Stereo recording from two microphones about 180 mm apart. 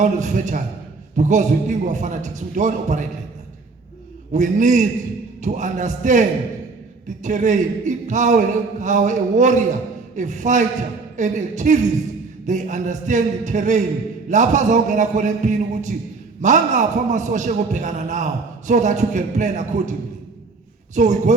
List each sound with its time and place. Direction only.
0.0 s a man's voice: 45° right (ahead or behind)
4.3 s a man's voice: 45° right (ahead or behind)
20.9 s a man's voice: 40° right (ahead or behind)